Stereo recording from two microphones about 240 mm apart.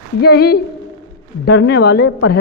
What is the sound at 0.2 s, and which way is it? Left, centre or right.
A woman's voice, left.